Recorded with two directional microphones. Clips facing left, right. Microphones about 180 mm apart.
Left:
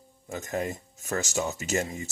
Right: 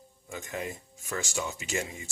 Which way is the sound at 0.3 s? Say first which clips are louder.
Left 5 dB; 45° left (ahead or behind).